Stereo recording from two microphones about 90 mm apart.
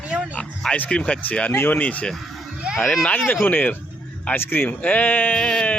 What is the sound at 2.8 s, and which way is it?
Speech, centre (ahead or behind).